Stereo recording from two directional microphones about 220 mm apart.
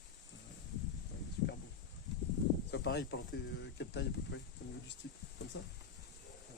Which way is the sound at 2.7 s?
50° left (ahead or behind).